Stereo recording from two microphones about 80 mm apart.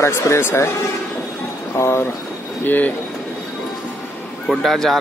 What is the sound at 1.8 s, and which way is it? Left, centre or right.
Speech, left.